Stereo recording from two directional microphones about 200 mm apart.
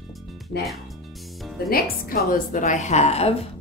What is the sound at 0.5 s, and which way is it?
Speech, 55° left (ahead or behind).